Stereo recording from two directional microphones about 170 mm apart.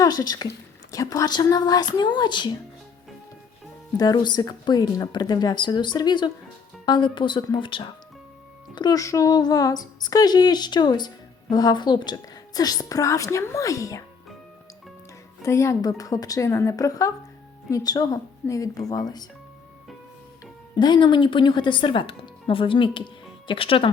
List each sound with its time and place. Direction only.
0.0 s a woman's voice: 20° left (ahead or behind)
3.9 s a woman's voice: 25° left (ahead or behind)
15.4 s a woman's voice: 15° left (ahead or behind)
20.7 s a woman's voice: 25° left (ahead or behind)